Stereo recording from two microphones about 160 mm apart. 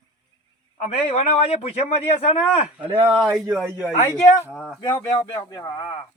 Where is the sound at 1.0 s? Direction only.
35° left (ahead or behind).